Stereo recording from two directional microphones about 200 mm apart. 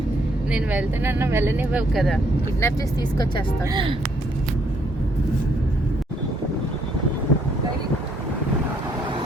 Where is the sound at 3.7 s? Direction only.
25° right (ahead or behind).